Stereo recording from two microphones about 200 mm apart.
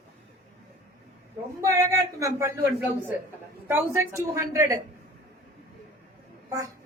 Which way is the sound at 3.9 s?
15° right (ahead or behind).